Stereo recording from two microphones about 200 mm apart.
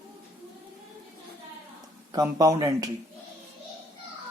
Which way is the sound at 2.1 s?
20° right (ahead or behind).